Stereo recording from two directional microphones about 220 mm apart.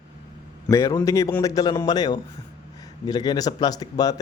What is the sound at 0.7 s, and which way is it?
A man's voice, 15° left (ahead or behind).